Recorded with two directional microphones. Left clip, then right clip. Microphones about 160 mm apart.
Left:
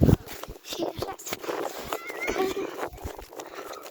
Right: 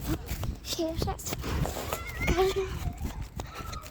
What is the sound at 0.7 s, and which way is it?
Speech, 25° right (ahead or behind).